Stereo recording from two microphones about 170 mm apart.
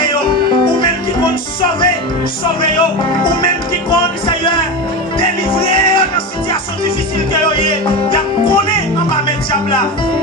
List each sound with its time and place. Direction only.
3.9 s music: 30° left (ahead or behind)
7.4 s music: 30° left (ahead or behind)